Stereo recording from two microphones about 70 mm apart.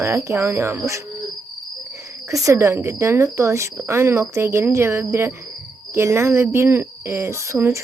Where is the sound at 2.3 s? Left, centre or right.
Right.